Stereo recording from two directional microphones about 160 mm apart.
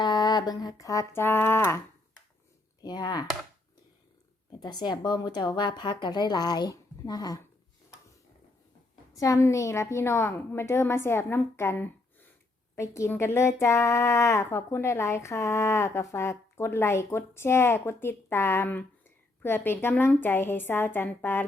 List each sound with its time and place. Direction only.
0.0 s a woman's voice: 25° left (ahead or behind)
2.8 s a woman's voice: 25° left (ahead or behind)
4.6 s a woman's voice: 25° left (ahead or behind)
9.1 s speech: 20° left (ahead or behind)